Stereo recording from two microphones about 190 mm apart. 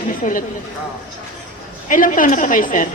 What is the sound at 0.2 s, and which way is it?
Speech, 40° left (ahead or behind).